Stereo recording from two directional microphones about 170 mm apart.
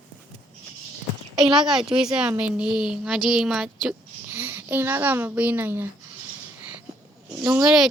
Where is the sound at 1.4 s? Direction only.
Centre (ahead or behind).